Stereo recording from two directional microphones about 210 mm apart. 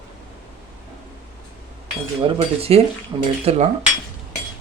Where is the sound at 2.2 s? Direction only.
30° right (ahead or behind).